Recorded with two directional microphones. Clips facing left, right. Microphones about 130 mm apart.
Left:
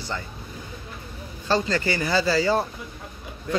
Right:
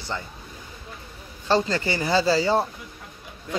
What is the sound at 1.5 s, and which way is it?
Speech, 25° right (ahead or behind).